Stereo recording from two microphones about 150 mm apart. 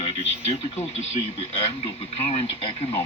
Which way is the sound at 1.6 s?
40° left (ahead or behind).